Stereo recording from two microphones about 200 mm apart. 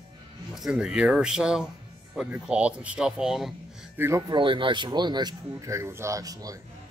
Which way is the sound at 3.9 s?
15° right (ahead or behind).